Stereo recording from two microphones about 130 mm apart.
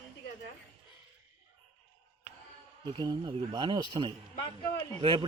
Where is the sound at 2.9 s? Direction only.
35° right (ahead or behind).